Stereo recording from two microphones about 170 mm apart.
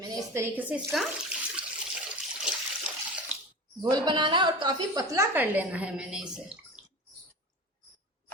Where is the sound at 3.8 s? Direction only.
25° right (ahead or behind); by 6.5 s 5° right (ahead or behind).